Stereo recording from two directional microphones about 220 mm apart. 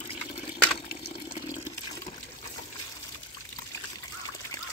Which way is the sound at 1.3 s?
20° left (ahead or behind).